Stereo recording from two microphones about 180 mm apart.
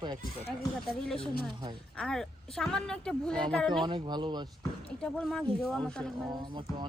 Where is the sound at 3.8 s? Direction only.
25° right (ahead or behind).